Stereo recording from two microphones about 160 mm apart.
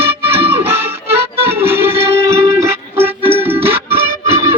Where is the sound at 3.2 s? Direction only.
35° right (ahead or behind).